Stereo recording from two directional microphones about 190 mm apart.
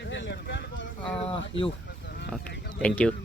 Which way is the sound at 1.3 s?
30° left (ahead or behind).